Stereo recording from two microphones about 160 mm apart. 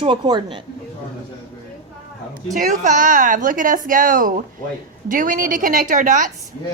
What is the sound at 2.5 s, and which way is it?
A woman's voice, 50° right (ahead or behind).